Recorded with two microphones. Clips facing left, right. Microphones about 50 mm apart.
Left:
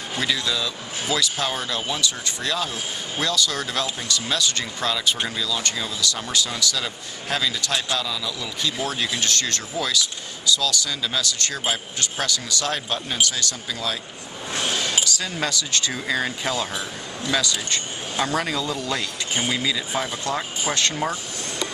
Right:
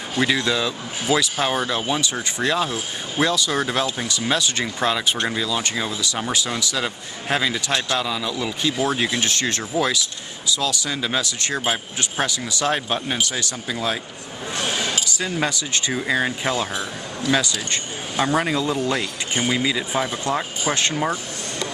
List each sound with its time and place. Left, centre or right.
0.2 s speech: right
15.0 s chink: right
15.4 s speech: centre